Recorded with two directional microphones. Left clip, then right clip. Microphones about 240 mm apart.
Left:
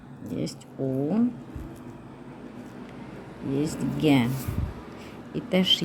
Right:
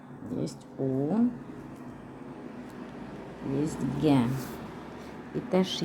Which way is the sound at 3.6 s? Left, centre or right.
Centre.